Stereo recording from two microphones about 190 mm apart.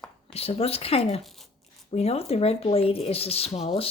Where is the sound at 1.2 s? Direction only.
Centre (ahead or behind).